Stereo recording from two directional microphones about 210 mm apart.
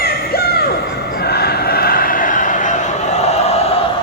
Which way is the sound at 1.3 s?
50° left (ahead or behind).